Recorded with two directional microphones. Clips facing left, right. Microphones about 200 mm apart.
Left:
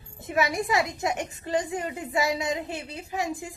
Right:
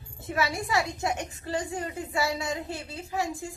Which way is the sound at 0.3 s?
20° left (ahead or behind).